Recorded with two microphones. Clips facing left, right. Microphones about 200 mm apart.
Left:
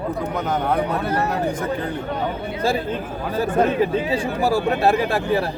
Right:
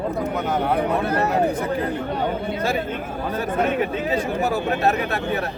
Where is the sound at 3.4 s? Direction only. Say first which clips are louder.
Left 4 dB; 30° left (ahead or behind).